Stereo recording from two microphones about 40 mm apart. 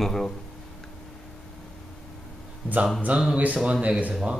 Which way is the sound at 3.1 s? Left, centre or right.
Right.